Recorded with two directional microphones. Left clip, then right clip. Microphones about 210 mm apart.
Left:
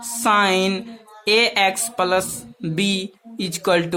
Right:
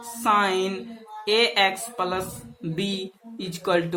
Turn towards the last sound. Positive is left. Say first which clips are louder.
# left 5 dB
turn(degrees=45)  # may be behind; listen again after turning